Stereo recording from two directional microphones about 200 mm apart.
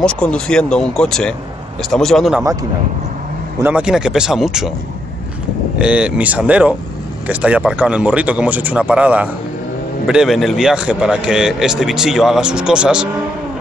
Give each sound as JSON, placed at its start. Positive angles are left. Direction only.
{"t": 0.0, "sound": "a man's voice", "side_deg": 5}
{"t": 3.6, "sound": "a man's voice", "side_deg": -5}
{"t": 5.8, "sound": "a man's voice", "side_deg": -5}